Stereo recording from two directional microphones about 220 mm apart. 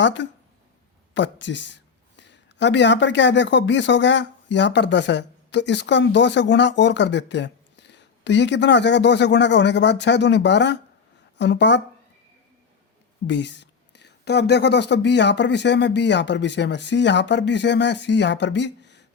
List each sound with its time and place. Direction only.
0.0 s speech: 55° left (ahead or behind)
13.2 s speech: 55° left (ahead or behind)